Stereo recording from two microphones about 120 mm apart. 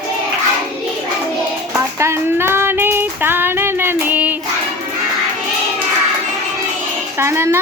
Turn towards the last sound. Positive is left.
turn(degrees=-20)  # may be behind; listen again after turning